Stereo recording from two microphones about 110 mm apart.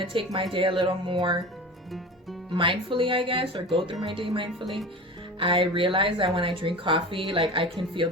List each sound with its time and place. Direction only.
0.0 s speech: 50° right (ahead or behind)
2.5 s speech: 50° right (ahead or behind)
4.6 s speech: centre (ahead or behind)
5.4 s speech: 50° right (ahead or behind)